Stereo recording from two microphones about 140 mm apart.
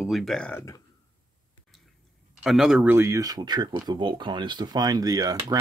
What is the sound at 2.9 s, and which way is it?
Speech, 20° right (ahead or behind).